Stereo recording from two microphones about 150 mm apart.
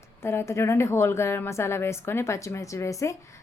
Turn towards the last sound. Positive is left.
turn(degrees=20)  # may be behind; listen again after turning